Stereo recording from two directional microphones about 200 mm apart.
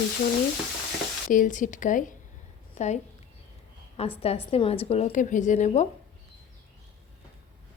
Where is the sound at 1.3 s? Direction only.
40° left (ahead or behind).